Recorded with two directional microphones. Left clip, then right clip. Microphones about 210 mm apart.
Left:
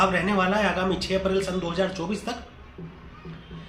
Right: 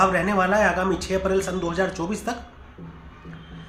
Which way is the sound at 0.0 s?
15° right (ahead or behind).